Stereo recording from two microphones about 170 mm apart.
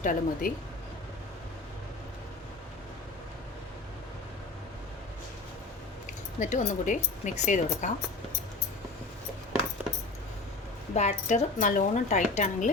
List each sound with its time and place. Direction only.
0.0 s speech: 50° left (ahead or behind)
6.1 s speech: 45° left (ahead or behind)
10.9 s speech: 40° left (ahead or behind)